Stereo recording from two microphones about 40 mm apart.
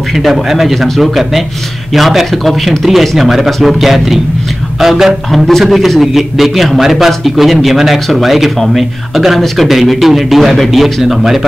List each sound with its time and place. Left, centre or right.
0.1 s speech: centre
5.5 s a man's voice: centre